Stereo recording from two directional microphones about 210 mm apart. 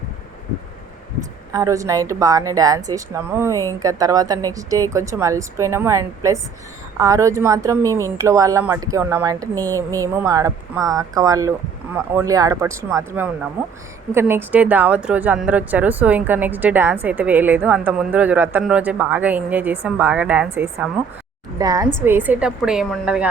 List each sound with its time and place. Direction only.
1.5 s a woman's voice: 15° right (ahead or behind)